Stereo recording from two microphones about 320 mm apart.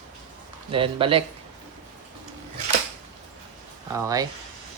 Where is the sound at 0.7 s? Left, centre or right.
Centre.